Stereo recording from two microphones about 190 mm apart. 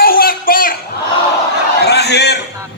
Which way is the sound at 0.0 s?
50° left (ahead or behind).